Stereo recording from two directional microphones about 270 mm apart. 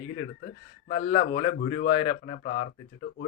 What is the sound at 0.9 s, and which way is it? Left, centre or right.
Speech, left.